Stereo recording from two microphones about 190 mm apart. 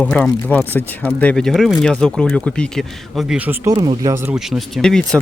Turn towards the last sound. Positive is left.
turn(degrees=5)  # may be behind; listen again after turning